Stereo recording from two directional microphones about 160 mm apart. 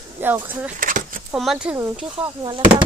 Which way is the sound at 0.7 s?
55° right (ahead or behind).